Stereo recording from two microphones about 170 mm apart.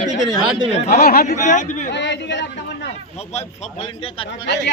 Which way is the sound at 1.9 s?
90° left.